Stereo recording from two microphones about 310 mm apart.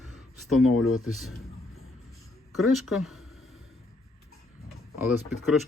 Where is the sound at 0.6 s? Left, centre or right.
Left.